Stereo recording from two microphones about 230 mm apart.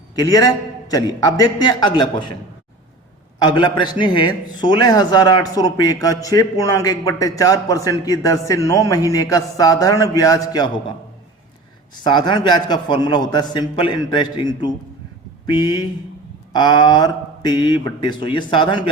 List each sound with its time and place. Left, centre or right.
0.2 s a man's voice: centre
3.3 s a man's voice: centre
12.0 s a man's voice: centre